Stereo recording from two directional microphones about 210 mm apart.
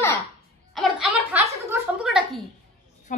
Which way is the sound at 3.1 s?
35° left (ahead or behind).